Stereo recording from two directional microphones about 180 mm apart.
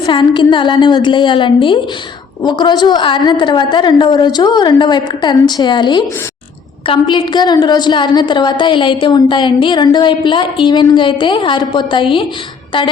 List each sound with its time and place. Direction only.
0.0 s a woman's voice: 25° left (ahead or behind)